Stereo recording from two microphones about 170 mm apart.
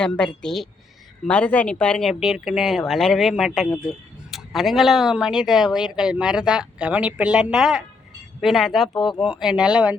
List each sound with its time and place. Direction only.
0.0 s speech: 5° left (ahead or behind)
8.9 s speech: 25° left (ahead or behind)
9.1 s speech: 5° right (ahead or behind)